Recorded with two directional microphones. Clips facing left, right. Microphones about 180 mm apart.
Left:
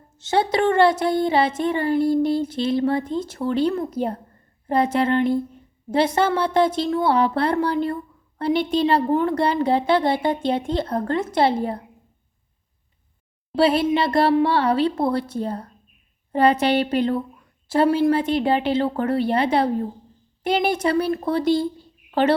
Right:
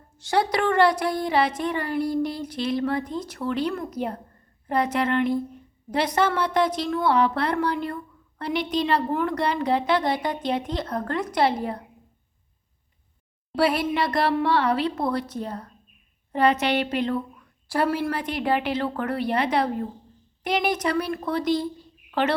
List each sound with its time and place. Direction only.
0.2 s speech: 25° left (ahead or behind)
13.6 s a woman's voice: 25° left (ahead or behind)